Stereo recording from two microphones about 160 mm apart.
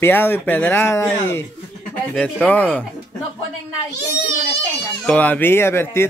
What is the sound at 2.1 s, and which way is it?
Speech, 5° left (ahead or behind).